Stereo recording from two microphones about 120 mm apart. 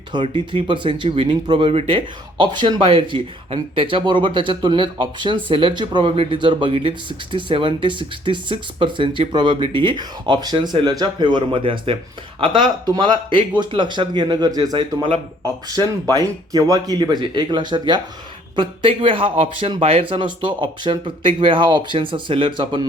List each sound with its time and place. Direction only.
0.1 s speech: 40° right (ahead or behind)
16.1 s speech: 30° right (ahead or behind)